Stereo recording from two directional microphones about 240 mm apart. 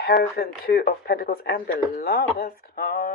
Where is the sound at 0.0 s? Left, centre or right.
Left.